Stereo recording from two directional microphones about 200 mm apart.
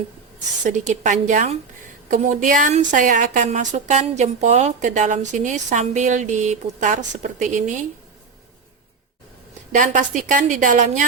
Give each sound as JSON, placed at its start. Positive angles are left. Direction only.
{"t": 0.6, "sound": "a woman's voice", "side_deg": -40}
{"t": 9.7, "sound": "a woman's voice", "side_deg": -40}